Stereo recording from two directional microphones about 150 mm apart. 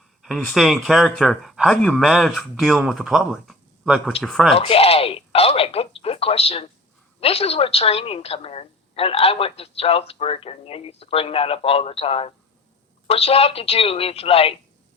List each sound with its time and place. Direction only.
0.2 s speech: centre (ahead or behind)
4.5 s a woman's voice: 40° left (ahead or behind)